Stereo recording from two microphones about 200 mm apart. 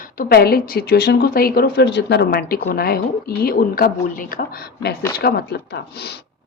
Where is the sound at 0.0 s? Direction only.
45° left (ahead or behind).